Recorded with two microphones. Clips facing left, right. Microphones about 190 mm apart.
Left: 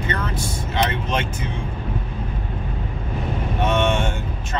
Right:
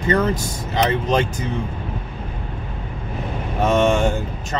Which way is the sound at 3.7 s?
40° right (ahead or behind).